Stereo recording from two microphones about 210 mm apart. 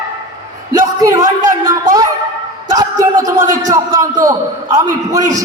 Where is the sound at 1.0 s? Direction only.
15° right (ahead or behind).